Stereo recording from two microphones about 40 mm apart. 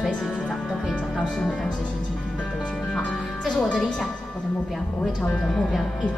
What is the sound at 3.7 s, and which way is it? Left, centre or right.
Speech, left.